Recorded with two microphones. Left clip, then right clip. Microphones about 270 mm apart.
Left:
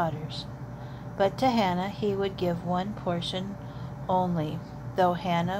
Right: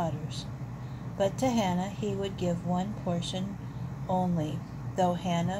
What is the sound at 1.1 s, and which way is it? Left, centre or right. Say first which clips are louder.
Speech: left 4 dB; left.